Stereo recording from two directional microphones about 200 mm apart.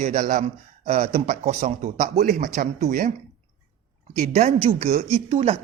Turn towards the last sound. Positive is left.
turn(degrees=-30)  # may be behind; listen again after turning